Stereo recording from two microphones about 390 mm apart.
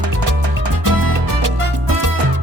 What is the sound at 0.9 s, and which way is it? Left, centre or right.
Music, right.